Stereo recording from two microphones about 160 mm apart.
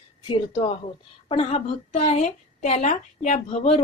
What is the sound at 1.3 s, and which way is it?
Speech, 40° left (ahead or behind).